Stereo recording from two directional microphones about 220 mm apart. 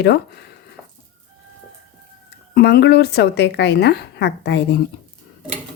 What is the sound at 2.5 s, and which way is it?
A woman's voice, 45° left (ahead or behind).